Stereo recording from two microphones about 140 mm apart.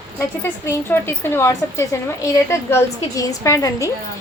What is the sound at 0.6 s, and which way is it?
A woman's voice, 15° left (ahead or behind).